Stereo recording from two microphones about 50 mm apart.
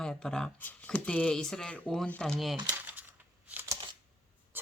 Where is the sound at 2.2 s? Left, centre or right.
Centre.